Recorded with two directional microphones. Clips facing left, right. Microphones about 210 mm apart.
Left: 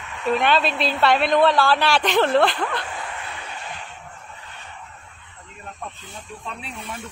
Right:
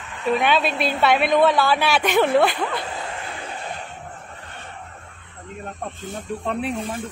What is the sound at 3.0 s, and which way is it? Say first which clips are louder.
Vehicle: right 2 dB; 35° right (ahead or behind).